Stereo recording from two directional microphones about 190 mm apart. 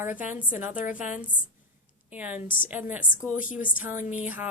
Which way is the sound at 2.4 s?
45° left (ahead or behind).